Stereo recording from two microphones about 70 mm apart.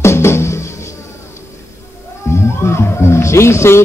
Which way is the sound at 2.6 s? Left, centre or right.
Left.